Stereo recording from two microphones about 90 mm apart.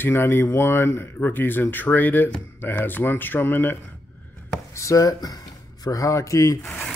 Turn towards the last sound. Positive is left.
turn(degrees=35)  # may be behind; listen again after turning